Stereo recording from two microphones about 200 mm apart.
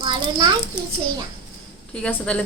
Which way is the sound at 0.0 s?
20° right (ahead or behind).